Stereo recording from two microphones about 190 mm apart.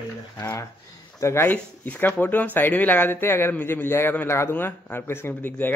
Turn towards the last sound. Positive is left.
turn(degrees=10)  # may be behind; listen again after turning